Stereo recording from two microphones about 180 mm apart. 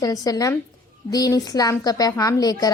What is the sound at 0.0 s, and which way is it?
A woman's voice, 20° left (ahead or behind).